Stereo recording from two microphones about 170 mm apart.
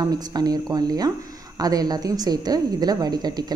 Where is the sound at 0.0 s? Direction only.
25° right (ahead or behind).